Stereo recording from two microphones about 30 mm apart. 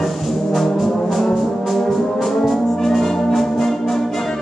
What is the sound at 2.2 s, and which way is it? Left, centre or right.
Brass instrument, centre.